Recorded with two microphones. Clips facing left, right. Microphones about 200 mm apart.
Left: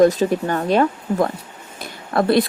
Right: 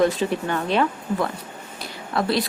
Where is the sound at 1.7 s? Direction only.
50° left (ahead or behind).